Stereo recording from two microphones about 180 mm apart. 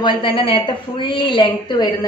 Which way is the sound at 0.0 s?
30° left (ahead or behind).